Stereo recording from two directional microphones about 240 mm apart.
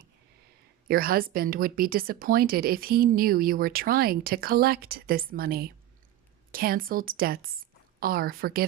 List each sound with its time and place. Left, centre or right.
0.9 s a woman's voice: right